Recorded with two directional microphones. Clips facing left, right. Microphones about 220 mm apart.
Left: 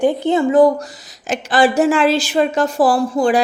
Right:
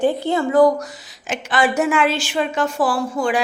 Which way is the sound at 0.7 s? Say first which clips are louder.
Even; 35° left (ahead or behind).